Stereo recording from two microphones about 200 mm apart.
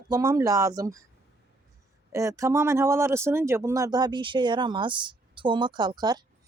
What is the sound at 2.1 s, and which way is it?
Speech, 15° right (ahead or behind).